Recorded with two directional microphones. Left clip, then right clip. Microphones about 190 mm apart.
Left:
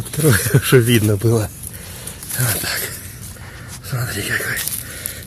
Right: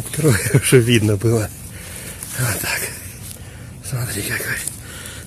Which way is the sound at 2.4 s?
15° left (ahead or behind).